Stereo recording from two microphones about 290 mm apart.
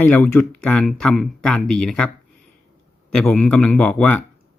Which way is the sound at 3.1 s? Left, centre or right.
Centre.